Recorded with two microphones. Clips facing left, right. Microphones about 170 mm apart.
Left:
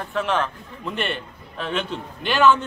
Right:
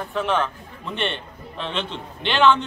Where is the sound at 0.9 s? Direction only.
5° left (ahead or behind).